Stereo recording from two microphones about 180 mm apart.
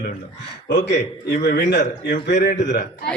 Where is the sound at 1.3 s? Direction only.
55° left (ahead or behind).